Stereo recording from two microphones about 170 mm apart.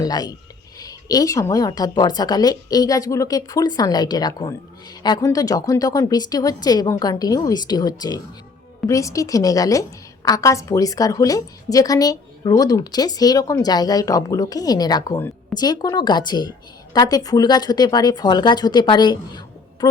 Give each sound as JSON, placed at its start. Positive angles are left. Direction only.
{"t": 0.0, "sound": "a woman's voice", "side_deg": 20}